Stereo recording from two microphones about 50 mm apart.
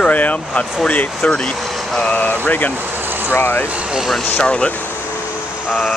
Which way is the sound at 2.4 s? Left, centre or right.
Left.